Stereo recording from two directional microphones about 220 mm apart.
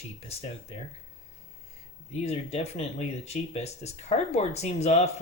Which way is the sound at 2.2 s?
30° left (ahead or behind).